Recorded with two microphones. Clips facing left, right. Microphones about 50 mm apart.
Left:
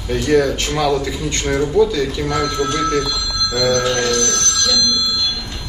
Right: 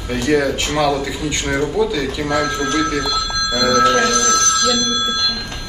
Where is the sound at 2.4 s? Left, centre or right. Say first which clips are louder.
Left 1 dB; right.